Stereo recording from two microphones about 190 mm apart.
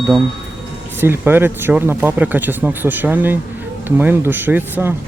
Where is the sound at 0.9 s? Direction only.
10° right (ahead or behind).